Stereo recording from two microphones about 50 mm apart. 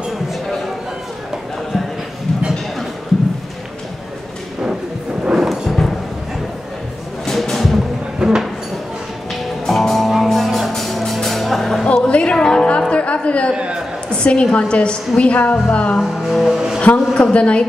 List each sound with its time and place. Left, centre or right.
5.2 s music: centre
7.2 s music: centre
8.2 s a sound: centre
9.3 s music: centre
11.8 s music: left
12.9 s a sound: left
14.1 s a woman's voice: centre
16.0 s music: centre
16.8 s a woman's voice: left